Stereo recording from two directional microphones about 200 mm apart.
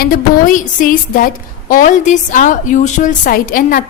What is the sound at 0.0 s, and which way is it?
A woman's voice, 45° left (ahead or behind).